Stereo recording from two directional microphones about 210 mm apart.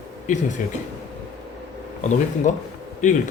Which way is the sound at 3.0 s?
35° left (ahead or behind).